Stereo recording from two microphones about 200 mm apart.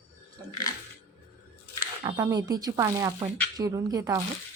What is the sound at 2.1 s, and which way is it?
Speech, 15° right (ahead or behind).